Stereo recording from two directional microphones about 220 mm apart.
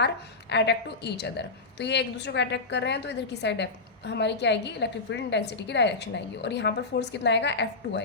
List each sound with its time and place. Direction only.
0.5 s a woman's voice: 50° left (ahead or behind)